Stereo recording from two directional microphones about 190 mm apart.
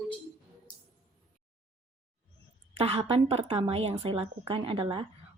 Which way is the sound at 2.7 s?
30° right (ahead or behind).